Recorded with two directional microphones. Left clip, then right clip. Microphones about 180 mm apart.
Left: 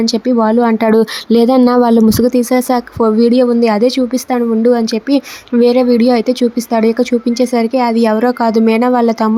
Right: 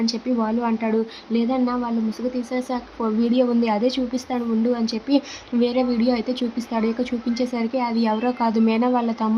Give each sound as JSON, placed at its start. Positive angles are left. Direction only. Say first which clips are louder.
{"t": 0.0, "sound": "speech", "louder": "left 11 dB", "side_deg": 45}
{"t": 3.2, "sound": "a woman's voice", "louder": "left 8 dB", "side_deg": 35}